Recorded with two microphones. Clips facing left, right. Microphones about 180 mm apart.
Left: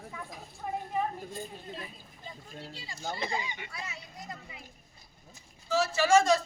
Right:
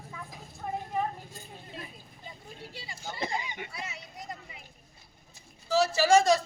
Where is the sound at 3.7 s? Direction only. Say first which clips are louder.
Right 1 dB; 25° right (ahead or behind).